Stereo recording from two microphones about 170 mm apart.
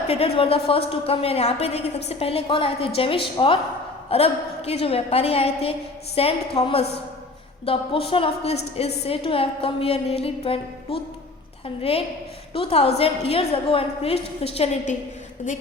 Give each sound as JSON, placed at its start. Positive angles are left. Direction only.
{"t": 0.1, "sound": "a woman's voice", "side_deg": 35}